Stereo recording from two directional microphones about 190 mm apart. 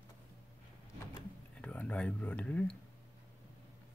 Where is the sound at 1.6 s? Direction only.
5° left (ahead or behind).